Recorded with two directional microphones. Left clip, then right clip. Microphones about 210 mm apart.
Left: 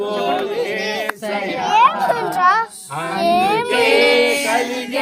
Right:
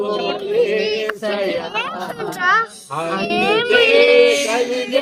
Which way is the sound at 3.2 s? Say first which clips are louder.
Left 3 dB; 60° left (ahead or behind).